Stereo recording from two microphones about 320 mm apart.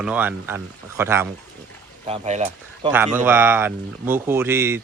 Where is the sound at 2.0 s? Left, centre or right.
Centre.